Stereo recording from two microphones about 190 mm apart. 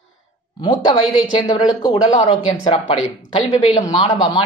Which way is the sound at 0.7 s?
25° left (ahead or behind).